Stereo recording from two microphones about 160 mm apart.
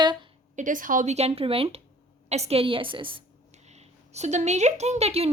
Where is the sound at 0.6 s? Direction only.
55° right (ahead or behind); by 3.2 s 30° right (ahead or behind).